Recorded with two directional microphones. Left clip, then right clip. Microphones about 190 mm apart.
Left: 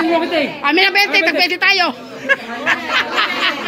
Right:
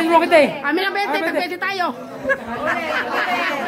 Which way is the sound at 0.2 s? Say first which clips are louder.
Right 4 dB; 25° right (ahead or behind).